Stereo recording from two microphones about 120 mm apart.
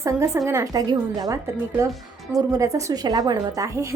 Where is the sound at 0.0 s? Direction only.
25° right (ahead or behind).